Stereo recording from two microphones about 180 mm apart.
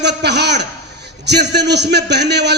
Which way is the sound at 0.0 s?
70° right (ahead or behind).